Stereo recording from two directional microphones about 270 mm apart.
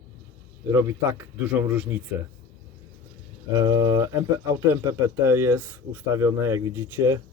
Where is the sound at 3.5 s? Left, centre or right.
Centre.